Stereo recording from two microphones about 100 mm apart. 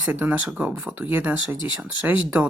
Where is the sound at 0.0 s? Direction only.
15° right (ahead or behind).